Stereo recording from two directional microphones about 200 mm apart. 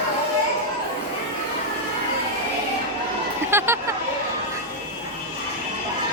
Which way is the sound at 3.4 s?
10° right (ahead or behind).